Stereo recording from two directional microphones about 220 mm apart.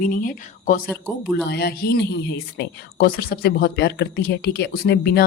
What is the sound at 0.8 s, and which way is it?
Speech, 5° left (ahead or behind).